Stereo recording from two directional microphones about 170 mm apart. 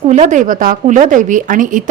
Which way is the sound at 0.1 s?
45° right (ahead or behind).